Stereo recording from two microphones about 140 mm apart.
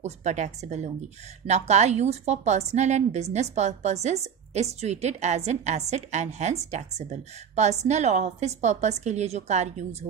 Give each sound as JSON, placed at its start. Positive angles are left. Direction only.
{"t": 0.0, "sound": "a woman's voice", "side_deg": -55}